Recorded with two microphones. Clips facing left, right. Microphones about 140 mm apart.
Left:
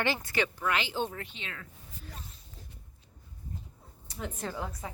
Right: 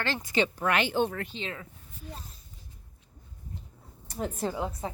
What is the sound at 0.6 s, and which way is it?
Speech, 55° right (ahead or behind).